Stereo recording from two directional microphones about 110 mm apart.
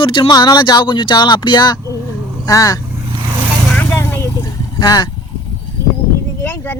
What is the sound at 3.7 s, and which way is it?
Vehicle, 20° left (ahead or behind).